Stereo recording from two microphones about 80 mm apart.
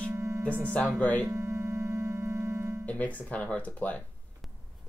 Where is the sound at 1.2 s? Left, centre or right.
Right.